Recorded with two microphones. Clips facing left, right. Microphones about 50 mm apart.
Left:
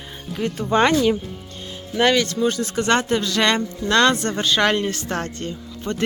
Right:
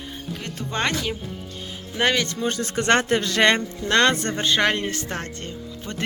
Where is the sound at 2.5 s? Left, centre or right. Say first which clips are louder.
Left 1 dB; right.